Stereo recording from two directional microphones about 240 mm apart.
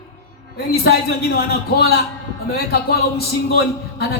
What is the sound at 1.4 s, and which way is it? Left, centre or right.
Speech, left.